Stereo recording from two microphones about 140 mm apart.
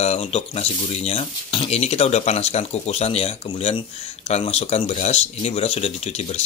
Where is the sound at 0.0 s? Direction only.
50° left (ahead or behind).